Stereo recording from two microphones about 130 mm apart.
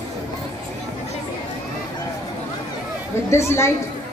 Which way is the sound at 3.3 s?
20° left (ahead or behind).